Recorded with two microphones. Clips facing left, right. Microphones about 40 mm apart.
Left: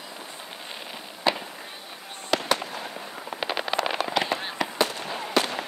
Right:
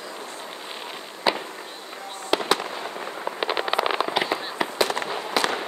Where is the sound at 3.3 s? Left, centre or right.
Centre.